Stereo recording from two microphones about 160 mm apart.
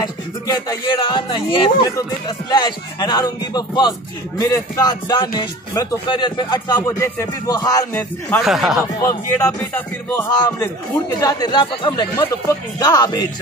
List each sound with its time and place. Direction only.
0.5 s speech: 25° left (ahead or behind)
8.4 s speech: centre (ahead or behind)
9.0 s speech: 20° left (ahead or behind)